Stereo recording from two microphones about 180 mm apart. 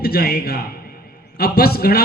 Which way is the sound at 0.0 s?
60° left (ahead or behind).